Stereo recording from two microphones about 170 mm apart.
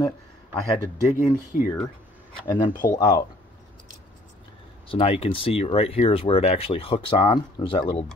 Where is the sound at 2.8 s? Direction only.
20° left (ahead or behind).